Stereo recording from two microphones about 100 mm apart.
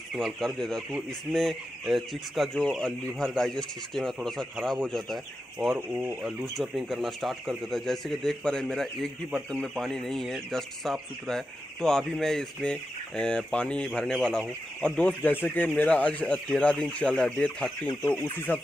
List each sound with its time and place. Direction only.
0.1 s speech: 5° left (ahead or behind)
5.8 s speech: 25° right (ahead or behind)
6.5 s speech: centre (ahead or behind)